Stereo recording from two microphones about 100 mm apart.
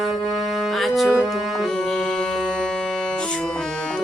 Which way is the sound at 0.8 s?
Centre (ahead or behind).